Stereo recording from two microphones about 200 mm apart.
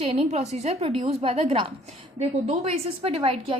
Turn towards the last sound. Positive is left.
turn(degrees=-30)  # may be behind; listen again after turning